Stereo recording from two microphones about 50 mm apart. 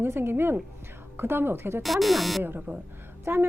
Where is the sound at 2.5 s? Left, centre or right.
Right.